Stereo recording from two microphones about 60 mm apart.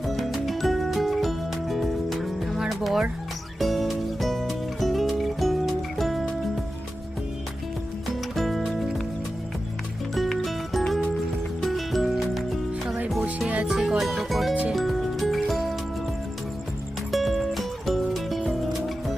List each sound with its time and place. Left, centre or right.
0.0 s music: centre
8.0 s music: centre
10.2 s music: centre
17.1 s music: centre